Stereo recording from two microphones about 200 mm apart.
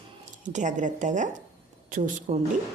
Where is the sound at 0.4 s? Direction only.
40° right (ahead or behind).